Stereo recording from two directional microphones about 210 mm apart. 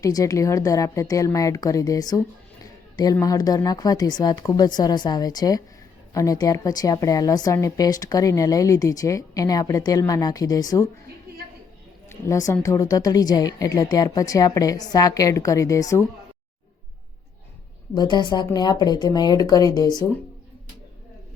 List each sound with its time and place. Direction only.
0.0 s a woman's voice: 15° left (ahead or behind)
12.0 s a woman's voice: 15° left (ahead or behind)
17.9 s speech: 20° left (ahead or behind)